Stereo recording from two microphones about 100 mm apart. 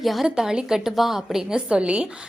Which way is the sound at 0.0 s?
Centre (ahead or behind).